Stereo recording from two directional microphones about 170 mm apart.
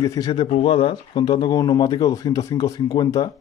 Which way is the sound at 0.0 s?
20° left (ahead or behind).